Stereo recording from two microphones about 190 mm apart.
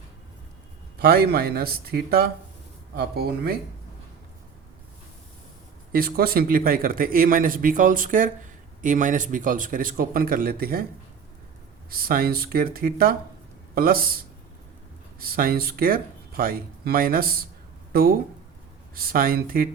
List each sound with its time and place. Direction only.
0.9 s speech: 55° right (ahead or behind)
5.9 s a man's voice: 50° right (ahead or behind)
11.9 s a man's voice: 50° right (ahead or behind)
15.2 s a man's voice: 50° right (ahead or behind)